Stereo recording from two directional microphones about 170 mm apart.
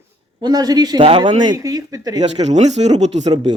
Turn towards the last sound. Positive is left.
turn(degrees=-40)  # may be behind; listen again after turning